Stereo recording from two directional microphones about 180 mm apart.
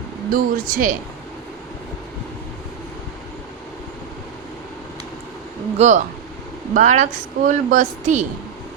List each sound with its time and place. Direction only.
0.3 s a woman's voice: 50° right (ahead or behind)
5.7 s a woman's voice: 40° right (ahead or behind)